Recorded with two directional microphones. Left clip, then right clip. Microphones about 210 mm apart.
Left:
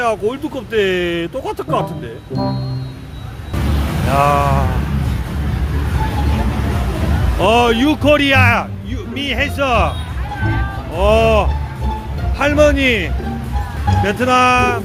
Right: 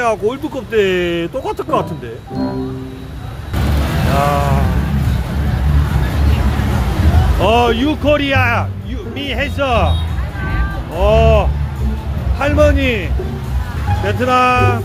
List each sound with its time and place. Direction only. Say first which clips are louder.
0.0 s speech: right 1 dB; 5° left (ahead or behind)
4.2 s speech: left 3 dB; 25° left (ahead or behind)
7.4 s speech: left 1 dB; 15° left (ahead or behind)
10.9 s speech: even; 20° left (ahead or behind)